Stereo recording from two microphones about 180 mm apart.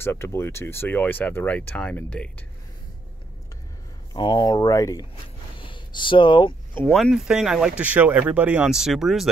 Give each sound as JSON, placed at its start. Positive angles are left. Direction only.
{"t": 0.0, "sound": "speech", "side_deg": 15}
{"t": 4.1, "sound": "speech", "side_deg": 25}
{"t": 5.6, "sound": "a sound", "side_deg": 25}
{"t": 6.7, "sound": "speech", "side_deg": 5}